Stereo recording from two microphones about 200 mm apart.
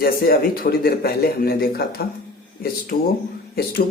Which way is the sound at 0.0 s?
50° left (ahead or behind).